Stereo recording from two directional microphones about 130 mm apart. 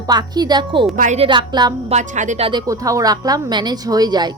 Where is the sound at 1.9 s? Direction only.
65° right (ahead or behind).